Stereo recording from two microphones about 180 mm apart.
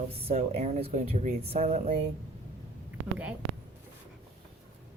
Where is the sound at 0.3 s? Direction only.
35° right (ahead or behind).